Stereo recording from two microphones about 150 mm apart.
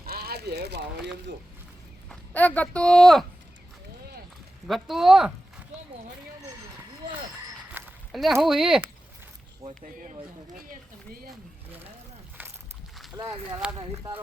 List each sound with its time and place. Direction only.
0.0 s a sound: 90° right
2.0 s speech: 10° left (ahead or behind)
4.6 s speech: centre (ahead or behind)
7.7 s a sound: 10° right (ahead or behind)
8.1 s speech: centre (ahead or behind)
12.4 s walk: 10° right (ahead or behind)
13.1 s speech: 25° right (ahead or behind)